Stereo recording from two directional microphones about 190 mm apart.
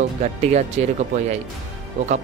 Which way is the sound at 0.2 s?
35° right (ahead or behind).